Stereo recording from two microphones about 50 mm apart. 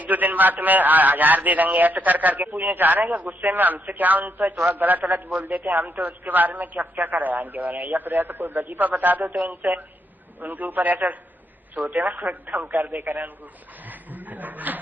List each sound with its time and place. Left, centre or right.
0.0 s a man's voice: right
12.2 s a man's voice: right
13.8 s a sound: right